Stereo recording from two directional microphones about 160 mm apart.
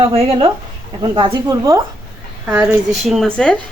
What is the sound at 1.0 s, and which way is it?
A woman's voice, 25° right (ahead or behind).